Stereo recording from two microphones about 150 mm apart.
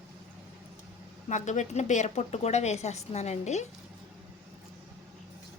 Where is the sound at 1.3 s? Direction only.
55° left (ahead or behind).